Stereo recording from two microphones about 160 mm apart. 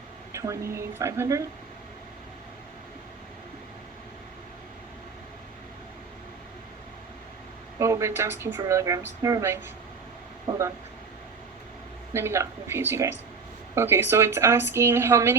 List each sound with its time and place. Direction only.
0.3 s a woman's voice: 20° right (ahead or behind)
7.8 s a woman's voice: 20° right (ahead or behind)
12.1 s a woman's voice: 15° right (ahead or behind)